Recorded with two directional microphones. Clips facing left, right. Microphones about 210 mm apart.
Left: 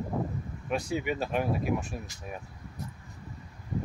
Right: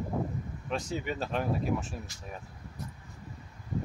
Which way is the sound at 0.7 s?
10° left (ahead or behind).